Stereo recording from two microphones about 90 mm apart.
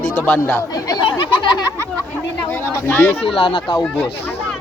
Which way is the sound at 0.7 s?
45° left (ahead or behind).